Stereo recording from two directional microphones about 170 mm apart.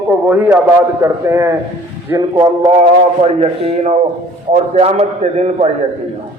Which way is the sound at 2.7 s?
40° right (ahead or behind).